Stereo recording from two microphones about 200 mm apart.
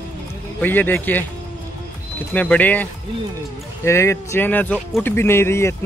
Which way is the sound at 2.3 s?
5° left (ahead or behind).